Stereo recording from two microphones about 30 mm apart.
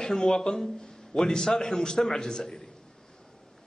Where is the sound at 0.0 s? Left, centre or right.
Centre.